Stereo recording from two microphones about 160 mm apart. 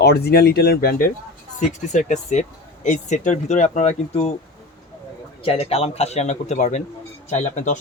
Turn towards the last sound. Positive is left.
turn(degrees=50)  # may be behind; listen again after turning